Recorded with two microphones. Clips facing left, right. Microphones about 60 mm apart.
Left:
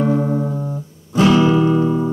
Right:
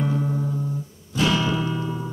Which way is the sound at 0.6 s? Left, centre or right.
Left.